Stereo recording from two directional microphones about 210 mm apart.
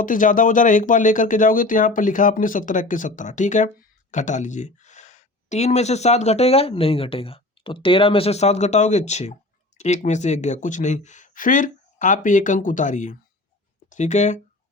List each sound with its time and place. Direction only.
0.0 s speech: 40° left (ahead or behind)